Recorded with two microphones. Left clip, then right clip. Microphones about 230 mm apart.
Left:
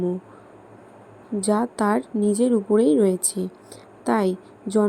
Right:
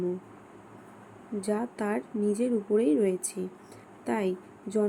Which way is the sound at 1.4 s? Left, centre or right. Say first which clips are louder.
Left 9 dB; left.